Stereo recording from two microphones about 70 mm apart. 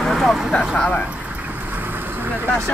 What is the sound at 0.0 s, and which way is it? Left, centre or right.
Speech, centre.